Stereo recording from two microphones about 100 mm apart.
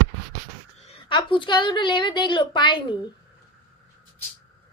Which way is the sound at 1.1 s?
55° left (ahead or behind).